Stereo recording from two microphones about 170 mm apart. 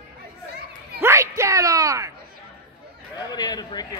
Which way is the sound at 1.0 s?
15° right (ahead or behind).